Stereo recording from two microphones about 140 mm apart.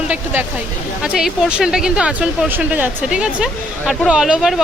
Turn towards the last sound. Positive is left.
turn(degrees=-5)  # may be behind; listen again after turning